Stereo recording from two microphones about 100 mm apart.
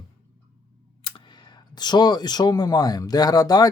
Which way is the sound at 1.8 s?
45° left (ahead or behind).